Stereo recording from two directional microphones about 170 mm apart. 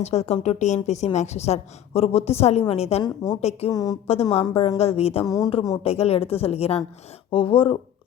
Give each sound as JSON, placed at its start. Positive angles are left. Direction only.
{"t": 0.0, "sound": "a woman's voice", "side_deg": 40}
{"t": 3.2, "sound": "speech", "side_deg": 25}
{"t": 4.0, "sound": "a woman's voice", "side_deg": 35}
{"t": 5.2, "sound": "speech", "side_deg": 20}
{"t": 5.8, "sound": "a woman's voice", "side_deg": 35}